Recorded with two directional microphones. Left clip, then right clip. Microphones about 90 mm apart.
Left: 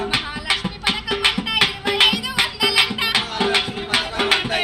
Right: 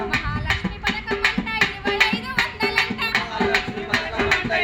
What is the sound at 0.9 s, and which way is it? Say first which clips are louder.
Music: left 3 dB; 30° right (ahead or behind).